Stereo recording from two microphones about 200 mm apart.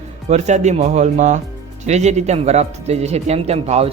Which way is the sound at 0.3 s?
35° right (ahead or behind).